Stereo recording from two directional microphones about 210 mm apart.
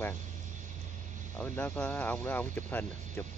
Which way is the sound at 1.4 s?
10° left (ahead or behind).